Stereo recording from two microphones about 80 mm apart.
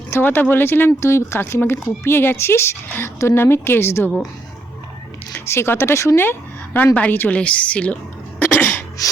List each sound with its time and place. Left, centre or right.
0.1 s speech: left
5.5 s speech: left
6.7 s a woman's voice: centre
8.4 s cough: left
9.0 s music: left